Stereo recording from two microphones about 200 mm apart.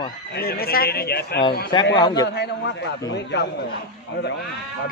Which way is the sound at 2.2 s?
60° left (ahead or behind).